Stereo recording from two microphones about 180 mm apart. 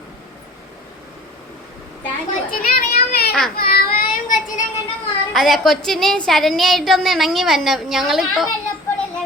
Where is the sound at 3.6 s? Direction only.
55° left (ahead or behind).